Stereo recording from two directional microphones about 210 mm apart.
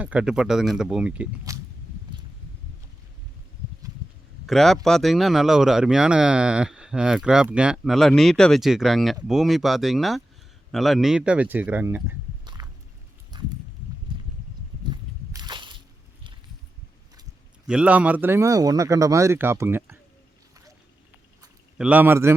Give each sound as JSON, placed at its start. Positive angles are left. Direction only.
{"t": 0.0, "sound": "speech", "side_deg": -5}
{"t": 4.4, "sound": "speech", "side_deg": 0}
{"t": 13.3, "sound": "a sound", "side_deg": -20}
{"t": 14.8, "sound": "a sound", "side_deg": -20}
{"t": 17.7, "sound": "speech", "side_deg": -5}
{"t": 21.8, "sound": "speech", "side_deg": -5}